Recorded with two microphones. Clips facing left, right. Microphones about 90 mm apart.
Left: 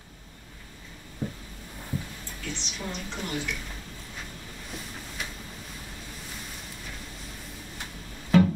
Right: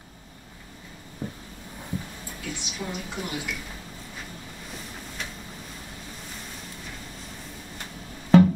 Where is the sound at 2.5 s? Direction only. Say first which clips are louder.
Right 2 dB; 10° right (ahead or behind).